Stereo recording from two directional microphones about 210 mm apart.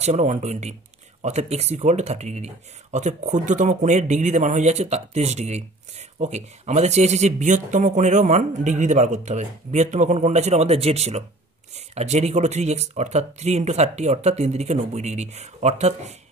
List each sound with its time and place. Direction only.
0.0 s speech: 35° right (ahead or behind)